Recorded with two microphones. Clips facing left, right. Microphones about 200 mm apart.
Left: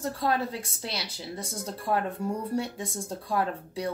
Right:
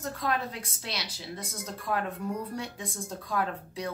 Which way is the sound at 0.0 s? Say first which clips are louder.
Left 3 dB; 30° left (ahead or behind).